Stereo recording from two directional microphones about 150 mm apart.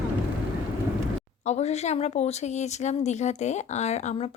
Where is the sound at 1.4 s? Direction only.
45° left (ahead or behind).